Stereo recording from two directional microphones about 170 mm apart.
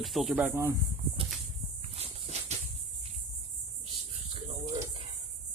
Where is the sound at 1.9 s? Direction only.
35° right (ahead or behind).